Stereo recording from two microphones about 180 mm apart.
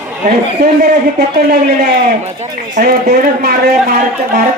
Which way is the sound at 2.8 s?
60° right (ahead or behind).